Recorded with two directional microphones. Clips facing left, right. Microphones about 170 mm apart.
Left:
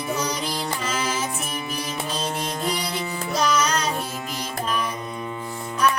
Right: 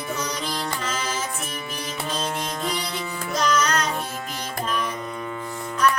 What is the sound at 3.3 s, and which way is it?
Music, 10° left (ahead or behind).